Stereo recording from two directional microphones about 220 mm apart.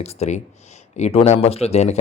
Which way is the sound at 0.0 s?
30° left (ahead or behind).